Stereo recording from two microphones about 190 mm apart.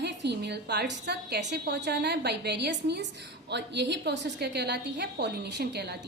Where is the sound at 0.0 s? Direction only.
65° right (ahead or behind).